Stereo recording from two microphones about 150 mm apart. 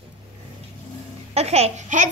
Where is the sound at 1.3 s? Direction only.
45° right (ahead or behind).